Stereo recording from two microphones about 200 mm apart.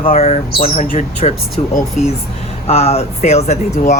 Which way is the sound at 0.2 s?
35° left (ahead or behind).